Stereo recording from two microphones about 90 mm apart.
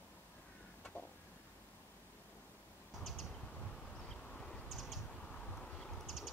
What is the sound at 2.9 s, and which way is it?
Bird, centre (ahead or behind).